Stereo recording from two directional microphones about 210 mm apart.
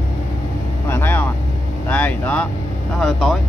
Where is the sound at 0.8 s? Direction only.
10° left (ahead or behind).